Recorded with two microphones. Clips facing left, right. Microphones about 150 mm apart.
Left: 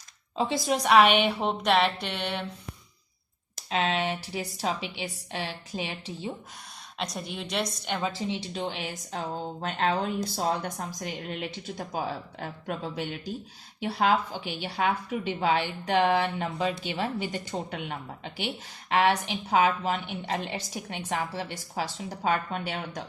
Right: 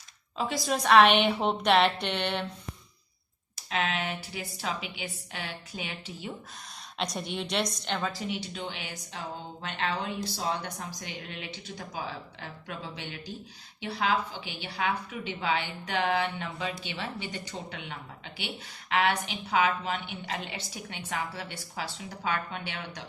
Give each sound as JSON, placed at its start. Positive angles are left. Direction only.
{"t": 0.3, "sound": "a woman's voice", "side_deg": 25}
{"t": 3.7, "sound": "speech", "side_deg": 30}
{"t": 7.0, "sound": "a woman's voice", "side_deg": 0}
{"t": 8.5, "sound": "a woman's voice", "side_deg": 35}